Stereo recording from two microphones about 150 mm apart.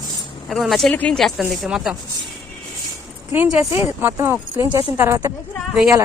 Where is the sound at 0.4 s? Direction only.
Centre (ahead or behind).